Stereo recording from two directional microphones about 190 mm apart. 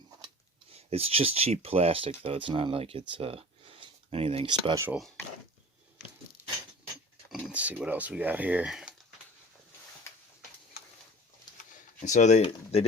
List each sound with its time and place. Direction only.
0.7 s speech: 35° right (ahead or behind); by 4.9 s 15° right (ahead or behind)
7.3 s speech: centre (ahead or behind)
12.0 s speech: 40° left (ahead or behind)